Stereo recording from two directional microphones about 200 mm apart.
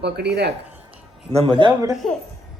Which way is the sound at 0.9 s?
30° right (ahead or behind).